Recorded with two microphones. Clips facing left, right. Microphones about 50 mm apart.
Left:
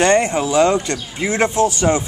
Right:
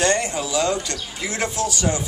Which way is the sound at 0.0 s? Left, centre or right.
Left.